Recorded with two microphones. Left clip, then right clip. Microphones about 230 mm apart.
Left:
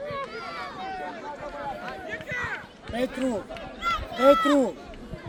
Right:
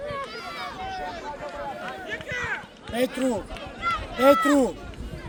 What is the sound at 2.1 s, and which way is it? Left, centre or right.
Run, right.